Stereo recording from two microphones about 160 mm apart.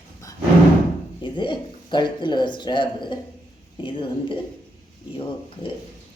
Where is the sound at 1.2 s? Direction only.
30° left (ahead or behind).